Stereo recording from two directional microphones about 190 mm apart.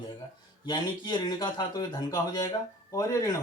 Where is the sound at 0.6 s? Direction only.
20° left (ahead or behind).